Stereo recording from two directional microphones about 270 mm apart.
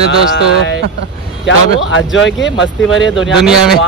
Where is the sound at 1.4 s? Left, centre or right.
Left.